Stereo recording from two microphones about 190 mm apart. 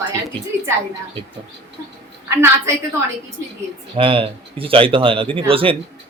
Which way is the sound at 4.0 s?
30° right (ahead or behind).